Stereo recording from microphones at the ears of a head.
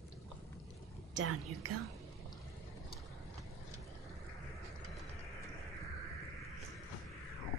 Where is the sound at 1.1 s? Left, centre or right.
Right.